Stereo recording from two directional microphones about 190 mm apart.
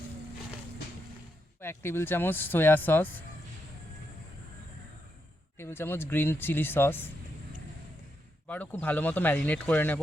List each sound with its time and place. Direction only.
1.6 s speech: 10° left (ahead or behind)
5.5 s speech: 10° left (ahead or behind)
8.4 s speech: 10° left (ahead or behind)